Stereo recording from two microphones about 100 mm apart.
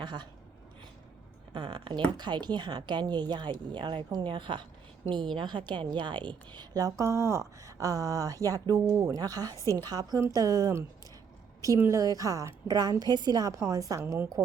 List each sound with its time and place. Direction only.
0.0 s speech: 50° right (ahead or behind)
1.5 s a woman's voice: 50° right (ahead or behind)
7.0 s a woman's voice: 30° right (ahead or behind)